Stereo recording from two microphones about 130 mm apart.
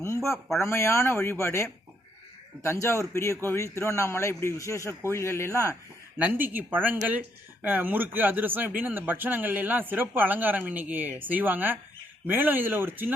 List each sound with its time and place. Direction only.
0.6 s a man's voice: 20° left (ahead or behind)
6.1 s speech: 15° right (ahead or behind)